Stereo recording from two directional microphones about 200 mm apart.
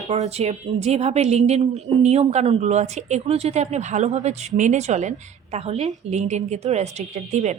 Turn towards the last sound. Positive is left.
turn(degrees=-35)  # may be behind; listen again after turning